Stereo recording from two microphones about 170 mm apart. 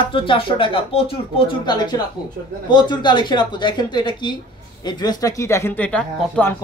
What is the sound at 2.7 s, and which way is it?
Speech, 25° left (ahead or behind).